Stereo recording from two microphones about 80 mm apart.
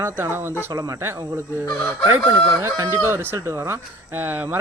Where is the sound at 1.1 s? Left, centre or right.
Right.